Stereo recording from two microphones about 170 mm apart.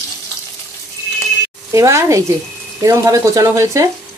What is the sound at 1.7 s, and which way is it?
Speech, 15° right (ahead or behind).